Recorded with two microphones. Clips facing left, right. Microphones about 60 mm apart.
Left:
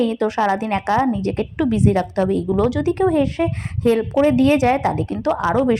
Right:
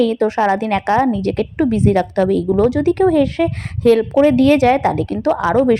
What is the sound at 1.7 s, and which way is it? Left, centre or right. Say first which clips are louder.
Speech: right 2 dB; right.